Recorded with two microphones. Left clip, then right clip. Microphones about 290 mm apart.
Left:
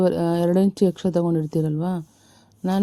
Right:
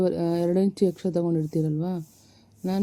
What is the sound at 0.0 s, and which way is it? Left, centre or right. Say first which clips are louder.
Mantra: left 4 dB; left.